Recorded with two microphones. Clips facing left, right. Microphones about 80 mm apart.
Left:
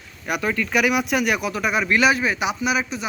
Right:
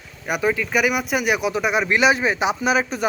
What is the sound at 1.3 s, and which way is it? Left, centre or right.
Speech, centre.